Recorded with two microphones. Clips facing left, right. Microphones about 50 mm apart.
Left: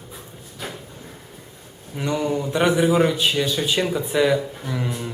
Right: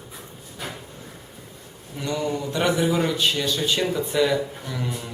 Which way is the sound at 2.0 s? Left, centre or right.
Centre.